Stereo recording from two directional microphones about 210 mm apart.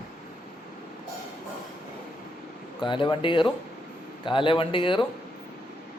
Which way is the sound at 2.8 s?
25° left (ahead or behind).